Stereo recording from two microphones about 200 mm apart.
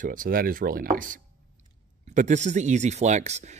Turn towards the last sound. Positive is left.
turn(degrees=-35)  # may be behind; listen again after turning